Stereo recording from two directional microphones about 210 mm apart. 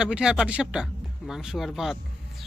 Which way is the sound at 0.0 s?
5° right (ahead or behind).